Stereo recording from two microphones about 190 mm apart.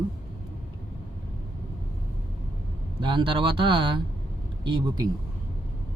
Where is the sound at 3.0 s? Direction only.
25° right (ahead or behind).